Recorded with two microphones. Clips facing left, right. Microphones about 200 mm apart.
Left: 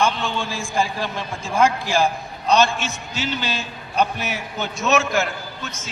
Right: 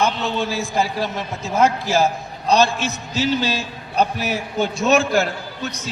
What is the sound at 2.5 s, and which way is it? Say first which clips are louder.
A man's voice: right 1 dB; 35° right (ahead or behind).